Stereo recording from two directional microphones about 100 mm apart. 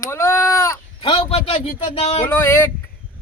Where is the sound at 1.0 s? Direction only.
60° left (ahead or behind); by 2.2 s 75° left (ahead or behind).